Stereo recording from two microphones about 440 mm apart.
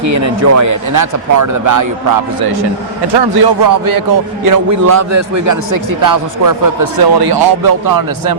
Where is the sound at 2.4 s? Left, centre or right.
Right.